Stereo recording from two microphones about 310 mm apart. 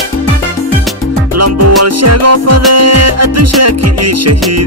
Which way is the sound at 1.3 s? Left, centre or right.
Right.